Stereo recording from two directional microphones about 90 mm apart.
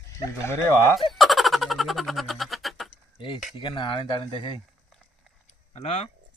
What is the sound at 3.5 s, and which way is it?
Speech, 65° left (ahead or behind).